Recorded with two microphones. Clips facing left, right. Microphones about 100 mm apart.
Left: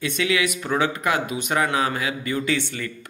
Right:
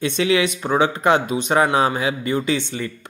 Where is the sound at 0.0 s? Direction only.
30° right (ahead or behind).